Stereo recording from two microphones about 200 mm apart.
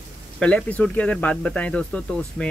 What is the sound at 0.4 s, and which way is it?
Speech, 5° left (ahead or behind).